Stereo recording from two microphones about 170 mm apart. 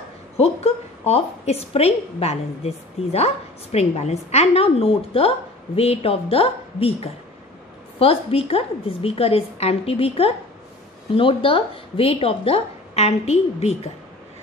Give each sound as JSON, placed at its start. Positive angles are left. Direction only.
{"t": 0.4, "sound": "a woman's voice", "side_deg": 40}